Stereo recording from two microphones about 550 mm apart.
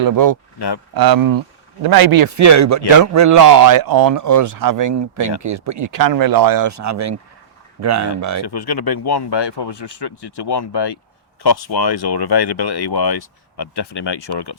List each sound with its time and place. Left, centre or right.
0.0 s a man's voice: right
8.4 s speech: left